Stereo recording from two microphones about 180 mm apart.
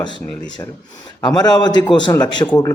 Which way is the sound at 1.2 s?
25° left (ahead or behind).